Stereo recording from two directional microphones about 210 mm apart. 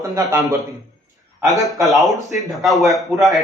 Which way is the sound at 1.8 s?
Centre (ahead or behind).